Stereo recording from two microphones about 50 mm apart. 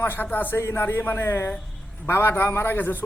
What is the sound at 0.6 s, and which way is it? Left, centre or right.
A man's voice, left.